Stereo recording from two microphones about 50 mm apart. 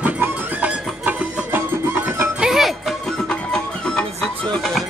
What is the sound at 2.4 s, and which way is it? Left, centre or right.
Music, centre.